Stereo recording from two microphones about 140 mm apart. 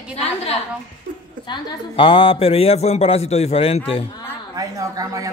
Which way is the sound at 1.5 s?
40° left (ahead or behind).